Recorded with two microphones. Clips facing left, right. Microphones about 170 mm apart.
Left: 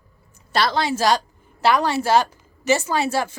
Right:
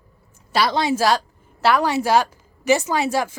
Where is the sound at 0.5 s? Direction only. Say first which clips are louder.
Right 1 dB; 10° right (ahead or behind).